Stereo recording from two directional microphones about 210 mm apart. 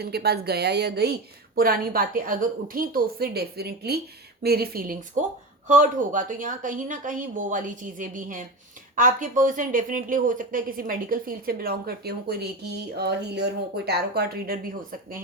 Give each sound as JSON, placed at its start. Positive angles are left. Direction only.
{"t": 0.0, "sound": "a woman's voice", "side_deg": -50}